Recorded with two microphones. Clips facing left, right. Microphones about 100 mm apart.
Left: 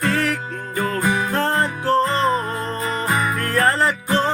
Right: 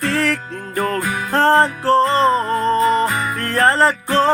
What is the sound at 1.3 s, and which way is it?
Music, 35° right (ahead or behind).